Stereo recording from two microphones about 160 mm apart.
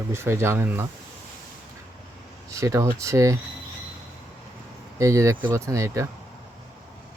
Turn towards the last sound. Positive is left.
turn(degrees=-20)  # may be behind; listen again after turning